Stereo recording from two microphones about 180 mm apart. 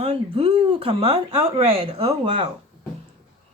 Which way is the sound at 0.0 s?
35° right (ahead or behind).